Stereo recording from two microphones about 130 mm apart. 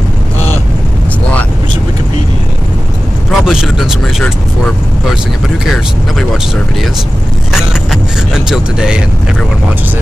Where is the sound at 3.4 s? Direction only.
5° right (ahead or behind).